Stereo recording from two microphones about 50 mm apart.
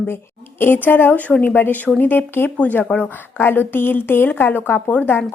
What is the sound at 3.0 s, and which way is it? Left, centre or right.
A woman's voice, left.